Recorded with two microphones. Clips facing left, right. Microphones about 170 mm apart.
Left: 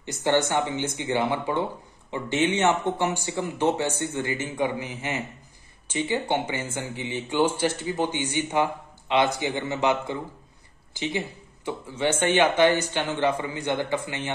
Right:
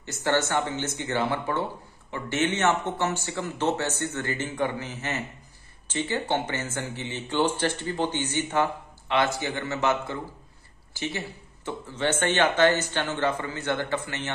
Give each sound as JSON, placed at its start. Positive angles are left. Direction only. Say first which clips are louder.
{"t": 0.0, "sound": "speech", "louder": "left 2 dB", "side_deg": 15}